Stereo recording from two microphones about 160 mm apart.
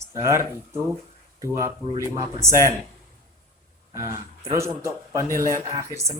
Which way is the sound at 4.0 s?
20° right (ahead or behind).